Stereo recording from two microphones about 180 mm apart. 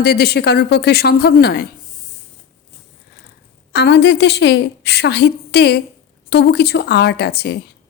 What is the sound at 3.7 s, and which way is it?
A woman's voice, 70° left (ahead or behind).